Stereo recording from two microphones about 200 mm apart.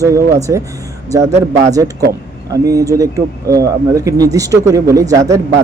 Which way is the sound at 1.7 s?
15° right (ahead or behind).